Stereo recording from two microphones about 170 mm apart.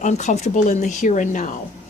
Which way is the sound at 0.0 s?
45° left (ahead or behind).